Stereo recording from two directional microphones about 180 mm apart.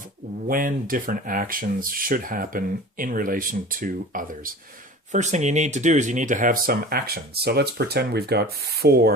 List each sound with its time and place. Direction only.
0.4 s speech: 50° right (ahead or behind)